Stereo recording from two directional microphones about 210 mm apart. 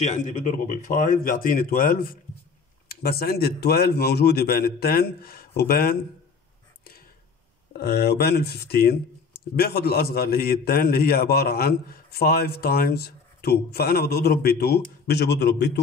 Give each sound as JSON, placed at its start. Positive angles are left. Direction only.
{"t": 0.0, "sound": "speech", "side_deg": 35}
{"t": 7.7, "sound": "speech", "side_deg": 50}